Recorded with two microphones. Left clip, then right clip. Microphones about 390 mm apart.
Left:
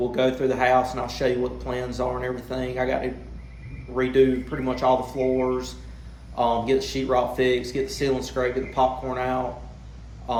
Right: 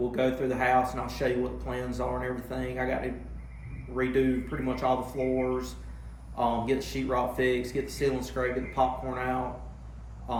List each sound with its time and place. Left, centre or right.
0.1 s speech: centre